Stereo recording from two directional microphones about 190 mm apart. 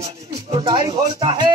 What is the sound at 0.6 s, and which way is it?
Speech, 25° right (ahead or behind).